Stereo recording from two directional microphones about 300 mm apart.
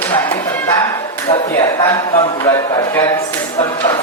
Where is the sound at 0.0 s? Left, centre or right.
Centre.